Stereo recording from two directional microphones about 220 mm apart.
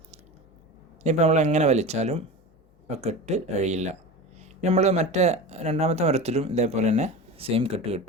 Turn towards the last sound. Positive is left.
turn(degrees=-25)  # may be behind; listen again after turning